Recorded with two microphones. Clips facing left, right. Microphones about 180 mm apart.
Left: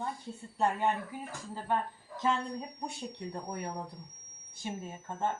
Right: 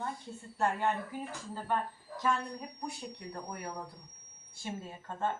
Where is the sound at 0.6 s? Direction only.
15° left (ahead or behind).